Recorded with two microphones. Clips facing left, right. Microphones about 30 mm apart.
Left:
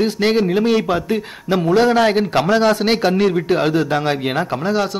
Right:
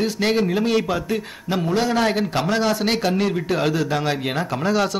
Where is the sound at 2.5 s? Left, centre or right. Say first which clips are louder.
Left 6 dB; left.